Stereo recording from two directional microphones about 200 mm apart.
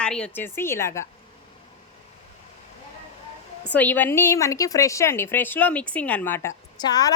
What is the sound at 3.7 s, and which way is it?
A woman's voice, 10° left (ahead or behind).